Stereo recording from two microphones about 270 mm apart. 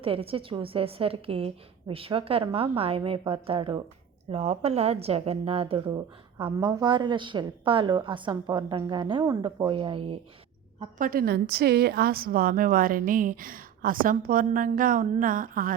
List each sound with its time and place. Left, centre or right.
0.0 s a woman's voice: right